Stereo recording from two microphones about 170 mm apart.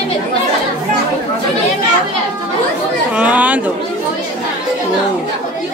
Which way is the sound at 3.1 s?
10° right (ahead or behind).